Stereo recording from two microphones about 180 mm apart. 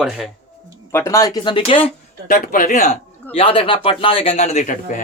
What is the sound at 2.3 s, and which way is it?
Speech, 50° left (ahead or behind).